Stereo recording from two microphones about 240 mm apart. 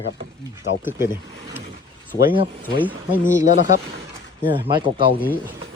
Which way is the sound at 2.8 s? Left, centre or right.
Centre.